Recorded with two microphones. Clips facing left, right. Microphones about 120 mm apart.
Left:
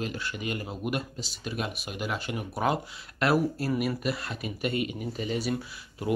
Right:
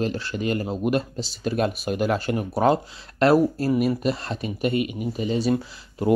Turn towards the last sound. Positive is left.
turn(degrees=-30)  # may be behind; listen again after turning